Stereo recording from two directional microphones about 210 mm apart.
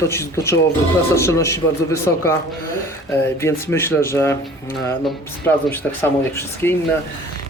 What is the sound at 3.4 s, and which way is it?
Speech, 10° left (ahead or behind).